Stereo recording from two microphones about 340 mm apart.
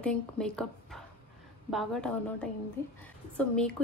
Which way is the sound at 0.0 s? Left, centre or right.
Centre.